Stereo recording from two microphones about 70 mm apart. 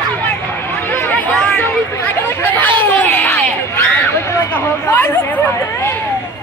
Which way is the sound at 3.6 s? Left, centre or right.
Left.